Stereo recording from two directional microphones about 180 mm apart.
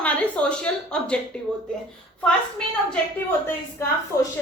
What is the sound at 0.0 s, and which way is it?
A woman's voice, 5° left (ahead or behind).